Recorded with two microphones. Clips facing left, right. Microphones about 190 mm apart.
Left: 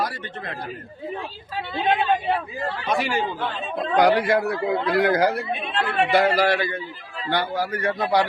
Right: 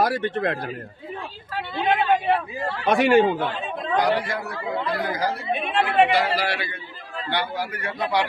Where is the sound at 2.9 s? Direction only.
65° right (ahead or behind).